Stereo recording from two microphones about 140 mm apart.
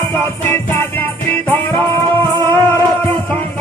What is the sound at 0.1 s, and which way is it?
Music, 15° left (ahead or behind).